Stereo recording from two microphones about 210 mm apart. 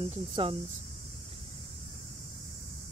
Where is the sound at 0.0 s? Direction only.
25° right (ahead or behind).